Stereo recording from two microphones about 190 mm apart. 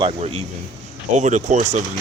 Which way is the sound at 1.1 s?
40° right (ahead or behind).